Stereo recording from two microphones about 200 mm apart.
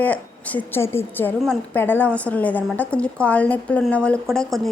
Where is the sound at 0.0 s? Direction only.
10° left (ahead or behind).